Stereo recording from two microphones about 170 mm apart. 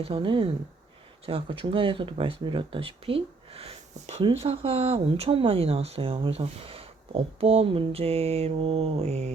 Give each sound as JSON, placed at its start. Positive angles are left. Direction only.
{"t": 0.0, "sound": "speech", "side_deg": -30}